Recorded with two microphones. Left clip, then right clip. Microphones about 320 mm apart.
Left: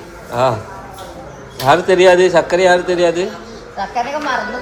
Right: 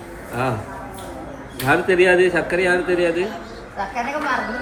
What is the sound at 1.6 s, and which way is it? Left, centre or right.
Speech, centre.